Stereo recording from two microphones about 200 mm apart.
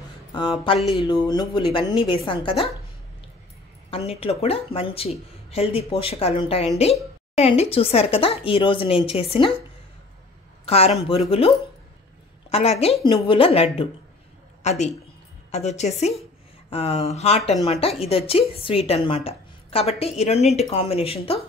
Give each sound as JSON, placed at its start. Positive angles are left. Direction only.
{"t": 0.3, "sound": "a woman's voice", "side_deg": 20}
{"t": 3.9, "sound": "a woman's voice", "side_deg": 30}
{"t": 10.6, "sound": "a woman's voice", "side_deg": 30}